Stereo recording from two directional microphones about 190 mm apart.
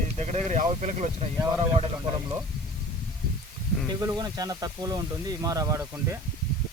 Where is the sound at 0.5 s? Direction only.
35° right (ahead or behind).